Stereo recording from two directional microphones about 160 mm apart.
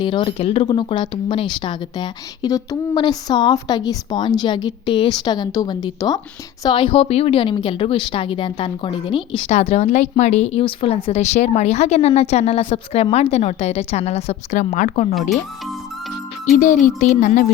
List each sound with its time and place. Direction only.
0.0 s speech: 30° left (ahead or behind)
9.5 s a woman's voice: 45° left (ahead or behind)
16.6 s a woman's voice: 55° left (ahead or behind)
17.2 s music: 55° left (ahead or behind)